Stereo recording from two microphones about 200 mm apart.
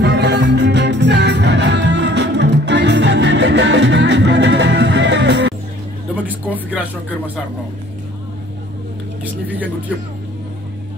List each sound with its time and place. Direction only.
0.0 s music: 60° right (ahead or behind)
6.2 s speech: 10° right (ahead or behind)
9.2 s speech: 10° right (ahead or behind)